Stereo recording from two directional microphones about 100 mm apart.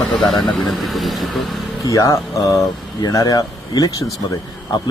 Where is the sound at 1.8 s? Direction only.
35° left (ahead or behind).